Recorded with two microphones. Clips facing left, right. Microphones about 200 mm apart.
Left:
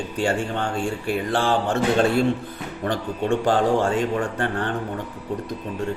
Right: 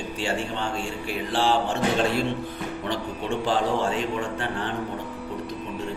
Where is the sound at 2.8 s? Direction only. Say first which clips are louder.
Left 7 dB; 50° left (ahead or behind).